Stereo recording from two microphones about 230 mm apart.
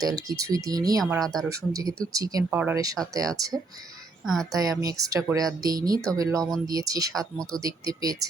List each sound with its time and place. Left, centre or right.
0.0 s speech: centre
1.0 s speech: centre
2.1 s speech: centre
4.2 s speech: centre
4.5 s speech: centre
7.1 s speech: centre
7.6 s speech: centre